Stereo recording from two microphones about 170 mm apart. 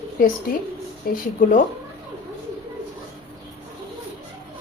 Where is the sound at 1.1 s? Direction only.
60° left (ahead or behind).